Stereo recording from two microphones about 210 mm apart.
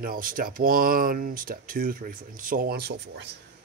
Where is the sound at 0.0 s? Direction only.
40° right (ahead or behind).